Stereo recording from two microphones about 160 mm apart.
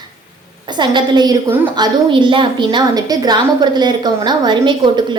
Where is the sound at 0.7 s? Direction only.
30° right (ahead or behind).